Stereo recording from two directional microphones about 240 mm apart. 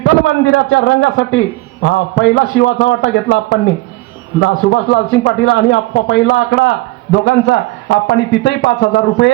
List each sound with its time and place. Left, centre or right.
0.0 s a man's voice: left